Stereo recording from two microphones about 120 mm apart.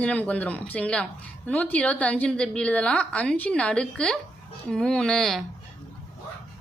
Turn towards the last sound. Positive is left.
turn(degrees=5)  # may be behind; listen again after turning